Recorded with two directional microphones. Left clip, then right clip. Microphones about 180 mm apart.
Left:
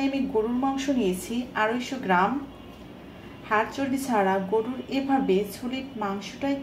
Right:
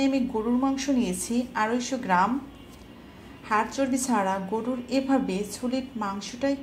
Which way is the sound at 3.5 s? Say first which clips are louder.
Even; 40° right (ahead or behind).